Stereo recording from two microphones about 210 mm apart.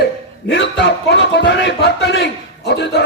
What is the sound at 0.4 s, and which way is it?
A man's voice, 55° left (ahead or behind).